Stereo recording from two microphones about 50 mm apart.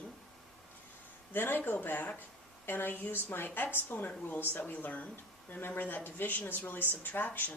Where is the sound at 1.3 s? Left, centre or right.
Left.